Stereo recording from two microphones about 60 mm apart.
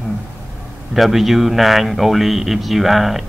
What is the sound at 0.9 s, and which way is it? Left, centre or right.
Speech, centre.